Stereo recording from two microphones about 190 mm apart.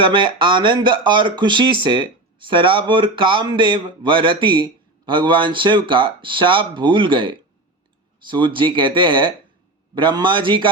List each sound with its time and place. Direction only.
0.0 s speech: 25° right (ahead or behind)